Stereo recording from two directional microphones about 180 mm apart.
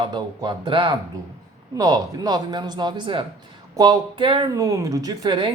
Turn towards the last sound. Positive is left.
turn(degrees=-25)  # may be behind; listen again after turning